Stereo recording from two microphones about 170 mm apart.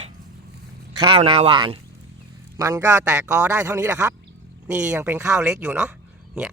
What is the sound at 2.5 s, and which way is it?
A man's voice, 20° right (ahead or behind).